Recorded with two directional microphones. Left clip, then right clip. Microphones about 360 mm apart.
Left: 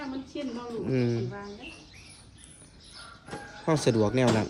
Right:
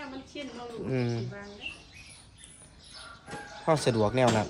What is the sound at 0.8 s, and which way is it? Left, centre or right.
Speech, centre.